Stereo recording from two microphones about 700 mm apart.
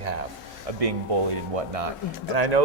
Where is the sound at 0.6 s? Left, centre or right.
Right.